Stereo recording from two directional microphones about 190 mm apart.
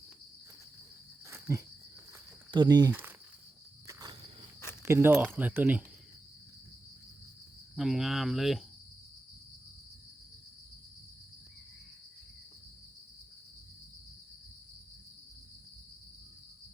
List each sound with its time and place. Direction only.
1.3 s cricket: 15° right (ahead or behind)
2.5 s speech: 25° right (ahead or behind)
2.9 s cricket: 10° right (ahead or behind)
4.8 s speech: 15° right (ahead or behind)
7.8 s speech: centre (ahead or behind)